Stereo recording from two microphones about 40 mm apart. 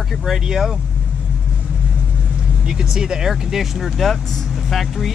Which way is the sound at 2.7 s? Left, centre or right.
Centre.